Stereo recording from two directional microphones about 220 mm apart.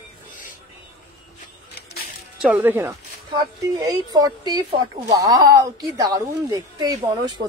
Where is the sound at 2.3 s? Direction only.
5° right (ahead or behind).